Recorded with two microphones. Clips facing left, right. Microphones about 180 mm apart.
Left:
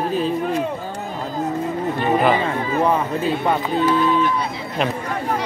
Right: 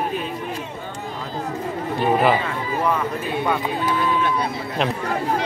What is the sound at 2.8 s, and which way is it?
Speech, 30° left (ahead or behind).